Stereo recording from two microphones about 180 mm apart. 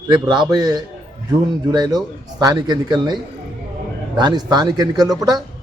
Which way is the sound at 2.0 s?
20° right (ahead or behind).